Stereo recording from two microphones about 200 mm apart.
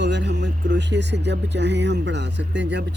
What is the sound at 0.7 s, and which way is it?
Speech, 60° right (ahead or behind).